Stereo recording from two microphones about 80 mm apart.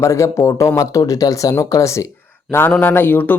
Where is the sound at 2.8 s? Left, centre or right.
Left.